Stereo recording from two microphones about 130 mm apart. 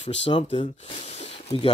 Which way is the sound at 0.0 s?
50° left (ahead or behind).